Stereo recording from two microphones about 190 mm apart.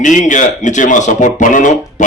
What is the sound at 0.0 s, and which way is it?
A man's voice, 40° left (ahead or behind).